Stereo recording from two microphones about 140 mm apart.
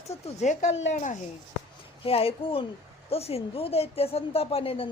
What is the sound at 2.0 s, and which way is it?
A woman's voice, 45° left (ahead or behind).